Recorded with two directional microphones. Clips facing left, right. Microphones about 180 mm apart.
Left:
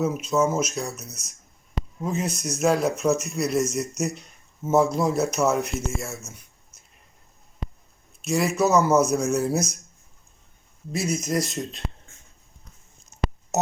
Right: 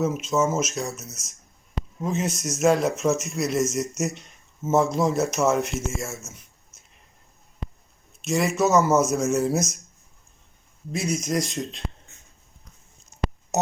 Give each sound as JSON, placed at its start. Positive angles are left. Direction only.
{"t": 0.0, "sound": "speech", "side_deg": 0}
{"t": 8.2, "sound": "speech", "side_deg": 0}
{"t": 10.9, "sound": "speech", "side_deg": 0}